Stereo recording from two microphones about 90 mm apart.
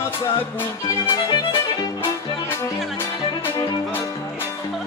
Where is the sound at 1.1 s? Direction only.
60° left (ahead or behind).